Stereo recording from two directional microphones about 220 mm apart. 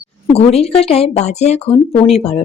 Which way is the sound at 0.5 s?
25° left (ahead or behind).